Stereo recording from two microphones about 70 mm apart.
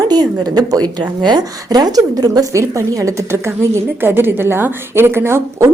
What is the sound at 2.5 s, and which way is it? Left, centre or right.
Speech, right.